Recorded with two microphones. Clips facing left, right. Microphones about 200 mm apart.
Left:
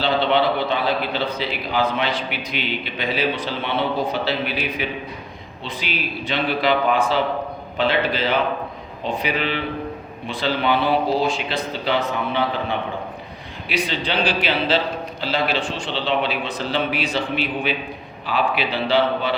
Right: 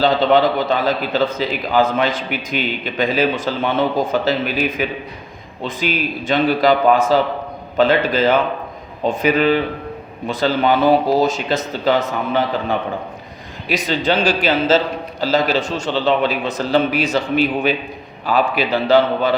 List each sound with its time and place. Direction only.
0.0 s a man's voice: 40° right (ahead or behind)